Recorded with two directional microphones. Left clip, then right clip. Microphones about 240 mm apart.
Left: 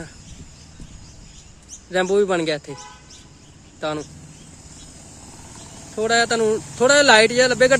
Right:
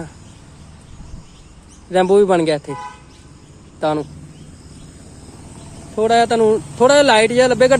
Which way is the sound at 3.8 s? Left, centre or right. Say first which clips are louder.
Right 7 dB; centre.